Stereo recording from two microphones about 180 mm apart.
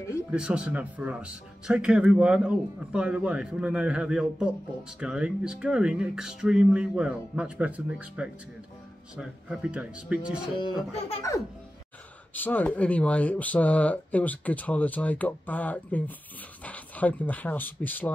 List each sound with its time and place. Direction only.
0.3 s speech: 5° right (ahead or behind)
10.6 s speech: 25° left (ahead or behind)
12.4 s speech: 10° left (ahead or behind)